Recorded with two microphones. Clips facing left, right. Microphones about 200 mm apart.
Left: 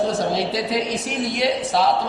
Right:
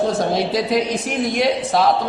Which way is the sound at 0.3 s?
50° right (ahead or behind).